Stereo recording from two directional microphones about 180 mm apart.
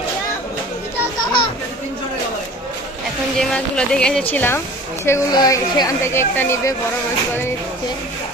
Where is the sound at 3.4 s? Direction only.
5° left (ahead or behind).